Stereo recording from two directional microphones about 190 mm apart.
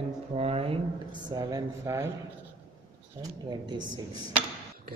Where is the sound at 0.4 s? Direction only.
30° right (ahead or behind).